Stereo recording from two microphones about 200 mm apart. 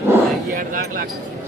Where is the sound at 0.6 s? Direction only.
45° right (ahead or behind).